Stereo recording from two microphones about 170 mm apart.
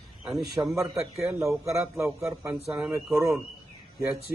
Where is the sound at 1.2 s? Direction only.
10° right (ahead or behind).